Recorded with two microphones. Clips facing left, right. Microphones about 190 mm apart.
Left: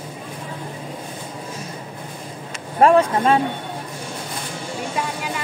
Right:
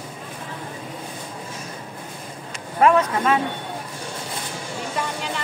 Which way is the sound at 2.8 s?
30° left (ahead or behind).